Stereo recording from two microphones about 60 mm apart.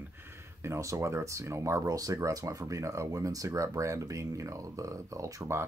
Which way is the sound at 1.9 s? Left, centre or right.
Right.